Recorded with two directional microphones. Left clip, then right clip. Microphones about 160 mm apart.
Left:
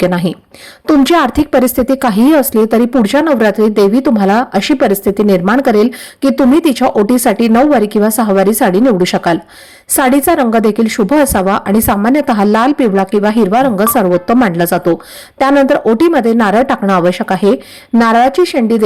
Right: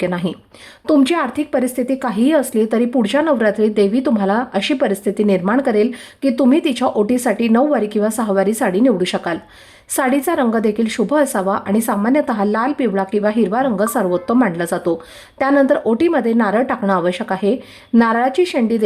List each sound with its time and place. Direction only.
0.0 s a woman's voice: 35° left (ahead or behind)